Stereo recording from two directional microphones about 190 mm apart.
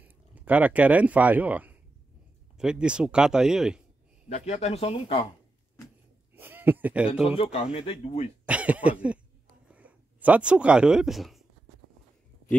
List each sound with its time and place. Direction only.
0.0 s speech: 10° right (ahead or behind)
4.3 s speech: 35° left (ahead or behind)
6.3 s a sound: 10° right (ahead or behind)
7.2 s speech: 30° left (ahead or behind)
8.5 s cough: 5° right (ahead or behind)
9.7 s a sound: 10° right (ahead or behind)